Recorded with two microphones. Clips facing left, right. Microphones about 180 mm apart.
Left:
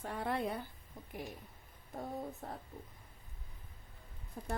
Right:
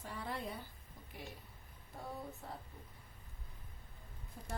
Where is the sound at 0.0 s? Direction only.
55° left (ahead or behind).